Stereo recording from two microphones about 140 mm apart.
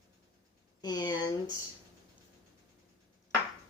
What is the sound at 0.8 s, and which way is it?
Speech, 30° left (ahead or behind).